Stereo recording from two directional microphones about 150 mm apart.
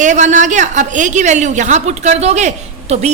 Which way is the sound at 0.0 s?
55° right (ahead or behind).